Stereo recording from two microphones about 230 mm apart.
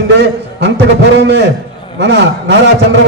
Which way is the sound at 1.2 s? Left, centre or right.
Right.